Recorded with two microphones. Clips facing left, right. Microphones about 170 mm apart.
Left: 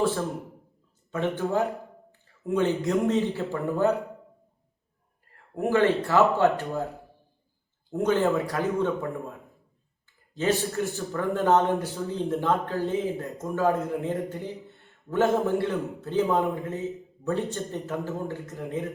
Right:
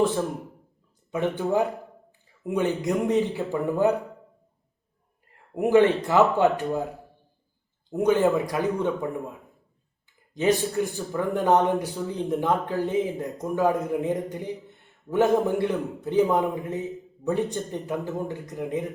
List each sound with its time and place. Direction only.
1.1 s a man's voice: 15° right (ahead or behind)
5.5 s a man's voice: 15° right (ahead or behind)